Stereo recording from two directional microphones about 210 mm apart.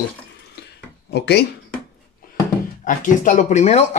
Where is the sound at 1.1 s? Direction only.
50° left (ahead or behind).